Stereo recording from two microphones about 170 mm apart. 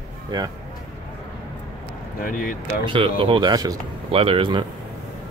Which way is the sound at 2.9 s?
30° right (ahead or behind).